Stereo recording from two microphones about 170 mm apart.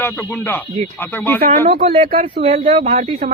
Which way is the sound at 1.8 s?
35° right (ahead or behind).